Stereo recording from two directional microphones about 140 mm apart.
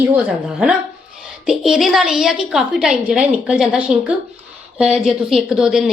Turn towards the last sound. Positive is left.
turn(degrees=-5)  # may be behind; listen again after turning